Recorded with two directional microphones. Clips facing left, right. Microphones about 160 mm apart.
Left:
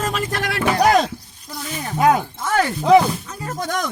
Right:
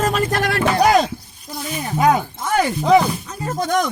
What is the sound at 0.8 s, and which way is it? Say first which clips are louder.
Speech: even; centre (ahead or behind).